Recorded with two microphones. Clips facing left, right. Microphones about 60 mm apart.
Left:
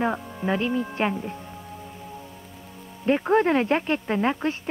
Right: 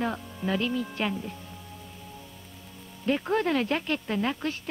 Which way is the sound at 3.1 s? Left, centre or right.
Left.